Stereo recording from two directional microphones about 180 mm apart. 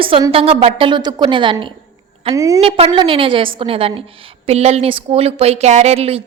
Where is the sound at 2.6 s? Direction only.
35° right (ahead or behind).